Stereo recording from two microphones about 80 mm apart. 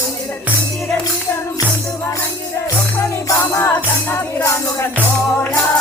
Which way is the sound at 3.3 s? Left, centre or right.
Left.